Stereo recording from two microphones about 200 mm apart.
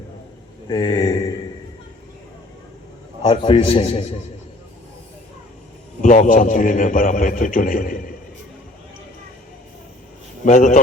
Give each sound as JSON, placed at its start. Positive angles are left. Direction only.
{"t": 0.7, "sound": "a man's voice", "side_deg": 20}
{"t": 3.2, "sound": "a man's voice", "side_deg": 25}
{"t": 6.0, "sound": "a man's voice", "side_deg": 40}
{"t": 10.4, "sound": "a man's voice", "side_deg": 40}